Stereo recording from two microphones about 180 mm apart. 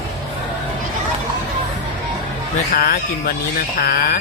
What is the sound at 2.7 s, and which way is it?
Speech, 55° left (ahead or behind).